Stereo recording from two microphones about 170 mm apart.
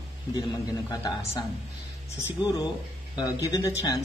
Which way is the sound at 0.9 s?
20° left (ahead or behind).